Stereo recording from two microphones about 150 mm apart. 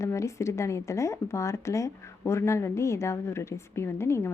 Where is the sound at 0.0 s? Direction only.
20° left (ahead or behind).